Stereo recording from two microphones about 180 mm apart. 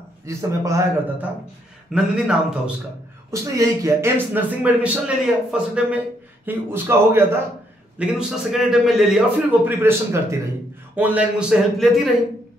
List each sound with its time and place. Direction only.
0.2 s speech: 15° right (ahead or behind)
1.9 s a man's voice: 5° right (ahead or behind)
3.3 s speech: 15° right (ahead or behind)
8.0 s a man's voice: centre (ahead or behind)